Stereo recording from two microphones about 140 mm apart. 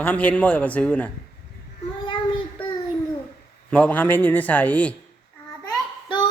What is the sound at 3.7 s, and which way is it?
Speech, 10° left (ahead or behind).